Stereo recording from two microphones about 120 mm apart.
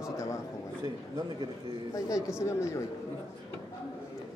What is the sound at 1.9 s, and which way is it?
Speech, 30° left (ahead or behind).